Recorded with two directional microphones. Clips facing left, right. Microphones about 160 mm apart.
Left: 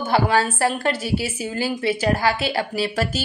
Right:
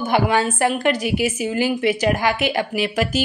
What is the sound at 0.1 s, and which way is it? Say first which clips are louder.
A woman's voice: even; 20° right (ahead or behind).